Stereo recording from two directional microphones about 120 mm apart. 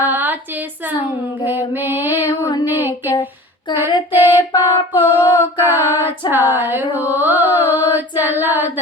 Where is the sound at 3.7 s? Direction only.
40° left (ahead or behind).